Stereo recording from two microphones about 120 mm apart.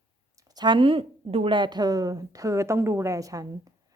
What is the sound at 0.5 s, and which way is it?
A woman's voice, 40° right (ahead or behind).